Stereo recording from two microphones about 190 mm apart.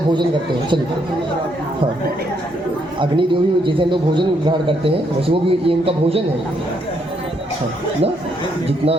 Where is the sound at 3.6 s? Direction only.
25° right (ahead or behind).